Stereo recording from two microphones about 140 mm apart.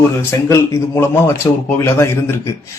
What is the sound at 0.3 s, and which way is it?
Speech, 20° left (ahead or behind).